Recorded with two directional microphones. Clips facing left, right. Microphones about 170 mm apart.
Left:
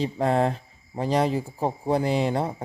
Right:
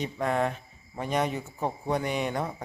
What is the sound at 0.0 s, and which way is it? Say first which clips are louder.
Speech: left 5 dB; 30° left (ahead or behind).